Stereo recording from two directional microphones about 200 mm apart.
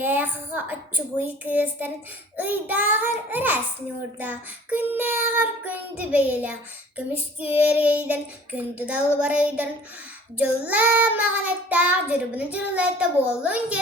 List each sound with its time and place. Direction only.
0.0 s child singing: 10° right (ahead or behind)